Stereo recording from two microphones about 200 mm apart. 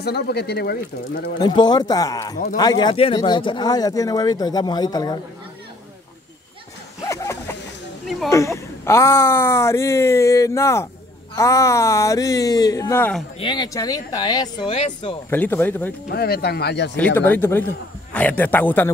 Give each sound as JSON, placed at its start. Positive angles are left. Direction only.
{"t": 0.0, "sound": "speech", "side_deg": 55}
{"t": 1.4, "sound": "speech", "side_deg": 20}
{"t": 7.0, "sound": "a sound", "side_deg": 15}
{"t": 8.3, "sound": "speech", "side_deg": 15}
{"t": 13.4, "sound": "speech", "side_deg": 20}
{"t": 15.2, "sound": "speech", "side_deg": 10}
{"t": 16.1, "sound": "speech", "side_deg": 50}
{"t": 16.9, "sound": "speech", "side_deg": 10}